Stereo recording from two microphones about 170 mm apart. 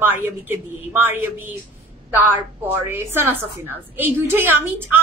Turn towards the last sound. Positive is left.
turn(degrees=-10)  # may be behind; listen again after turning